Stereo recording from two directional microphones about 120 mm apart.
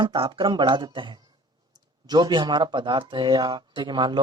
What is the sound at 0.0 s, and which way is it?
Speech, 40° right (ahead or behind).